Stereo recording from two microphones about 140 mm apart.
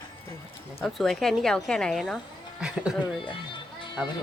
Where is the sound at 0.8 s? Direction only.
Centre (ahead or behind).